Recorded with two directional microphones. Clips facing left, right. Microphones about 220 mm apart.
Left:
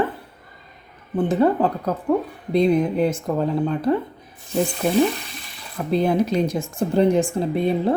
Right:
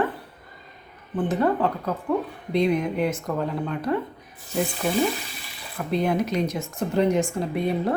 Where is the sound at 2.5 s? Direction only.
30° left (ahead or behind).